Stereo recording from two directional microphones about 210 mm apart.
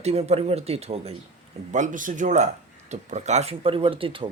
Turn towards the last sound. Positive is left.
turn(degrees=-25)  # may be behind; listen again after turning